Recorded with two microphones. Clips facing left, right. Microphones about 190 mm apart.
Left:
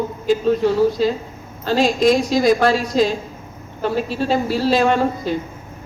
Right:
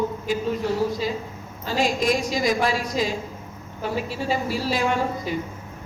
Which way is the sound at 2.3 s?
75° left (ahead or behind).